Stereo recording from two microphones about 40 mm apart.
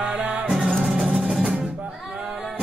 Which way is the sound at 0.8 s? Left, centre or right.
Centre.